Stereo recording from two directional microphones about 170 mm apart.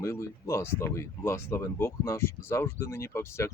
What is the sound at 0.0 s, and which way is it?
Speech, 15° left (ahead or behind).